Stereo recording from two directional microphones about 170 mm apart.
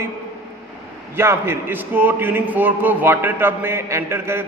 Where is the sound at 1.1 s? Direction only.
15° right (ahead or behind).